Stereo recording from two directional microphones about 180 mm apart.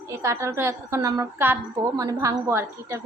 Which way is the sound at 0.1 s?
15° right (ahead or behind).